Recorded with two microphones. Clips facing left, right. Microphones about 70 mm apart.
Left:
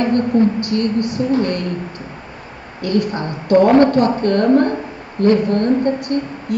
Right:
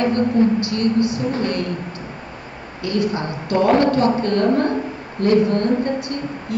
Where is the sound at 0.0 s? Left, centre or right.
Left.